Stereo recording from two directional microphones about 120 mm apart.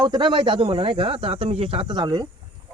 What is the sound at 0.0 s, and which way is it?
Speech, 40° right (ahead or behind).